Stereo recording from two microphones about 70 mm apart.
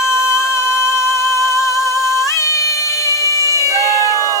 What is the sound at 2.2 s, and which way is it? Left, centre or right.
Music, left.